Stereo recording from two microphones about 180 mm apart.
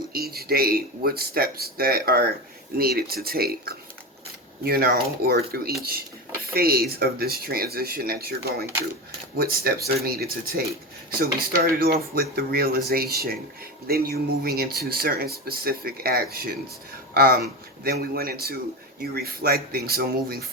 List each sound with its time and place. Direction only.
0.1 s speech: 60° right (ahead or behind)